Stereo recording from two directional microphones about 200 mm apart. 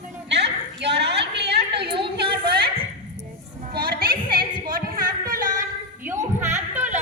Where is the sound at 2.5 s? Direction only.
55° right (ahead or behind).